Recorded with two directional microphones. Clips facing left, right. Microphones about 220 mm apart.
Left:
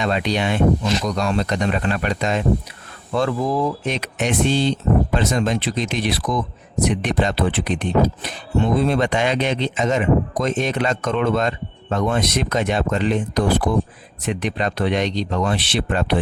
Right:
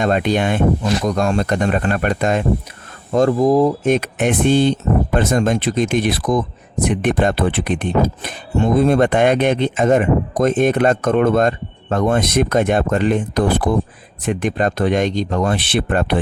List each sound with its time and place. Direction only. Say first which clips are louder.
0.0 s speech: right 4 dB; 50° right (ahead or behind)
3.1 s speech: right 7 dB; 40° right (ahead or behind)
3.9 s speech: right 5 dB; 55° right (ahead or behind)